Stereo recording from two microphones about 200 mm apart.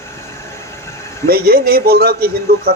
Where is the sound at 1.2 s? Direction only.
50° right (ahead or behind).